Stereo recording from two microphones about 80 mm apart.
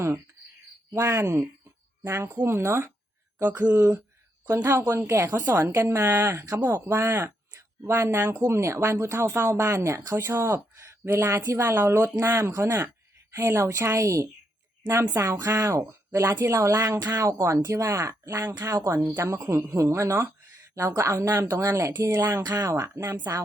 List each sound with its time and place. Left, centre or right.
0.9 s speech: right
3.8 s speech: right
4.4 s speech: right
6.4 s speech: right